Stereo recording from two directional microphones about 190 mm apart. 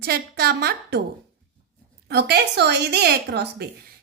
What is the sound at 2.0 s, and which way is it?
Speech, 60° right (ahead or behind).